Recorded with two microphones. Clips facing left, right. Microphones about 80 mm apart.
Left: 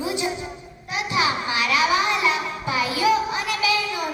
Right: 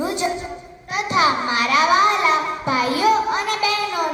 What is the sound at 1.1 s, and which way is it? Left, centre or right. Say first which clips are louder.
Child singing: right 5 dB; right.